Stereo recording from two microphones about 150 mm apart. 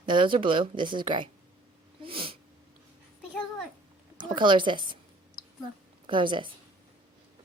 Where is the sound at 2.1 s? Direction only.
35° right (ahead or behind).